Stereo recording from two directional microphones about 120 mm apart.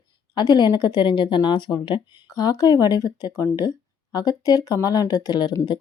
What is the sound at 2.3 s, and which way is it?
Speech, 30° left (ahead or behind).